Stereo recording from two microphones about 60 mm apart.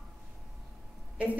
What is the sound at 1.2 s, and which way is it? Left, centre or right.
Speech, right.